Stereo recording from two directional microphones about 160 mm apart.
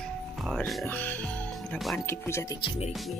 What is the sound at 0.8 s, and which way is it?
Music, 10° left (ahead or behind).